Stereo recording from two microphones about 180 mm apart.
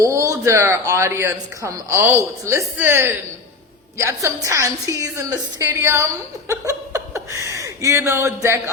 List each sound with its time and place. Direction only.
0.0 s speech: 15° right (ahead or behind)